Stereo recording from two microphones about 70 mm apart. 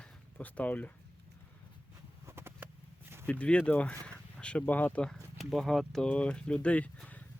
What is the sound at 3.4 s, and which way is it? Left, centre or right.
Speech, centre.